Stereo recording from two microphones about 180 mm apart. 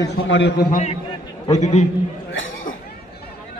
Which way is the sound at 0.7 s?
45° left (ahead or behind).